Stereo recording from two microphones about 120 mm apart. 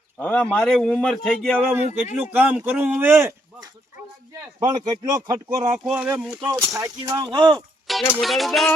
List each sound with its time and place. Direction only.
0.2 s speech: 10° left (ahead or behind)
1.1 s music: 5° left (ahead or behind)
1.8 s speech: 70° left (ahead or behind)
2.2 s speech: 15° right (ahead or behind)
4.3 s speech: 35° right (ahead or behind)
5.9 s speech: 15° right (ahead or behind)
6.2 s music: 5° right (ahead or behind)
6.7 s speech: 30° right (ahead or behind)
7.9 s music: centre (ahead or behind)